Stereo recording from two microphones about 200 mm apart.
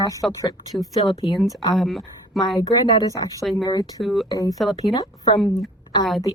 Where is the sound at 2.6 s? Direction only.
20° left (ahead or behind).